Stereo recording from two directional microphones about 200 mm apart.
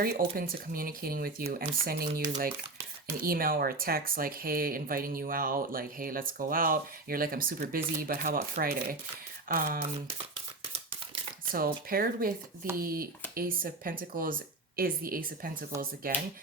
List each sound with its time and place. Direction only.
0.0 s speech: 45° right (ahead or behind)
11.5 s speech: 45° right (ahead or behind)